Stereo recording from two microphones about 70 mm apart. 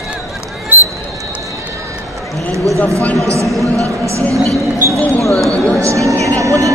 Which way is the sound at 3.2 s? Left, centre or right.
Right.